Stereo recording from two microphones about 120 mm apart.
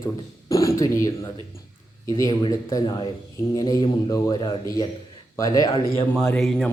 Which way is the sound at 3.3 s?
30° left (ahead or behind).